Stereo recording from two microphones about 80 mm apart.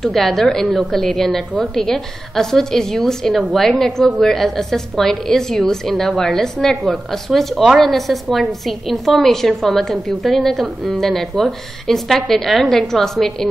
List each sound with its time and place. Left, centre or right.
0.0 s a woman's voice: centre